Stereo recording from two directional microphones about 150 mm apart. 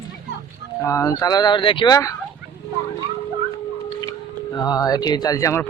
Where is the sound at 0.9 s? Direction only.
20° left (ahead or behind).